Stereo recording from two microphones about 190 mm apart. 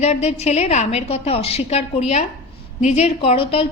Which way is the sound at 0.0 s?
35° left (ahead or behind).